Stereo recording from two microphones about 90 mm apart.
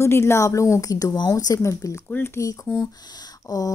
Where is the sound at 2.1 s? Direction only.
30° left (ahead or behind).